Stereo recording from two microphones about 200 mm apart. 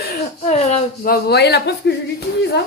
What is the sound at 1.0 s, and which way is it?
Speech, 50° left (ahead or behind).